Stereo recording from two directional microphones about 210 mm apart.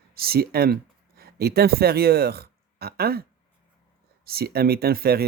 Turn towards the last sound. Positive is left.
turn(degrees=-45)  # may be behind; listen again after turning